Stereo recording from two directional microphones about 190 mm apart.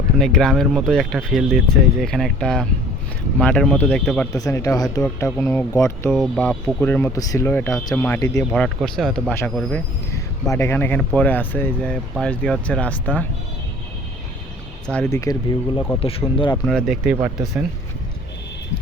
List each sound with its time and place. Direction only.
0.2 s speech: centre (ahead or behind)
4.4 s speech: 15° left (ahead or behind)
6.1 s speech: centre (ahead or behind)
8.4 s speech: centre (ahead or behind)
10.5 s speech: 15° left (ahead or behind)
14.8 s speech: 5° left (ahead or behind)
15.1 s speech: 20° left (ahead or behind)
16.6 s speech: centre (ahead or behind)
17.2 s speech: 20° right (ahead or behind)